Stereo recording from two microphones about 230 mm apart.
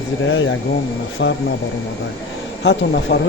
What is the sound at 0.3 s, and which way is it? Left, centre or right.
Speech, left.